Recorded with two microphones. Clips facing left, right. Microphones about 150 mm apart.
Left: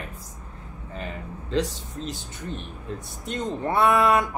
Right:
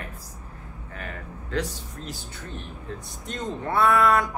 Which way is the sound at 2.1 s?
20° left (ahead or behind).